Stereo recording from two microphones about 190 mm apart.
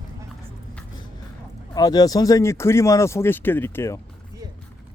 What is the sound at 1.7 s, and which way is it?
Speech, 20° left (ahead or behind).